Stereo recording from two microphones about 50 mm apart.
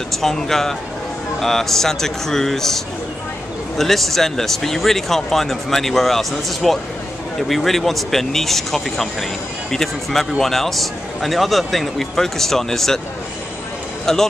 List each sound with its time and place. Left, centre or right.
0.1 s a man's voice: centre
14.1 s speech: centre